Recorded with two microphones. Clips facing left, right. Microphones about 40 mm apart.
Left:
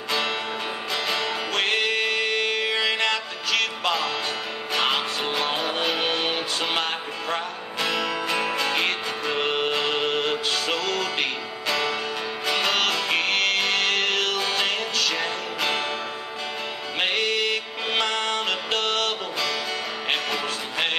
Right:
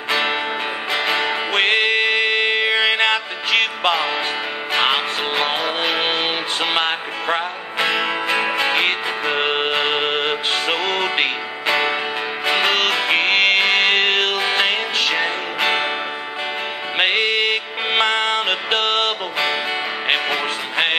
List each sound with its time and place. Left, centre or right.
0.1 s music: right
17.0 s music: right